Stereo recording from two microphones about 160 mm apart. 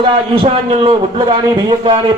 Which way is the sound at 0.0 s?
35° right (ahead or behind).